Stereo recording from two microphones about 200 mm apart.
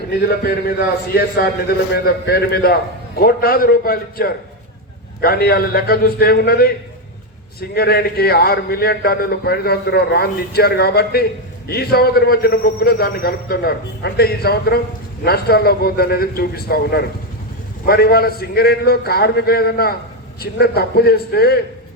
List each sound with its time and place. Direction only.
0.2 s a man's voice: 50° left (ahead or behind)
7.7 s a man's voice: 50° left (ahead or behind)